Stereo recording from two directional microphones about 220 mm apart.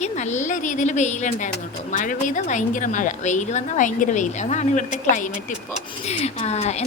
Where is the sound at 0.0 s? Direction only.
30° left (ahead or behind).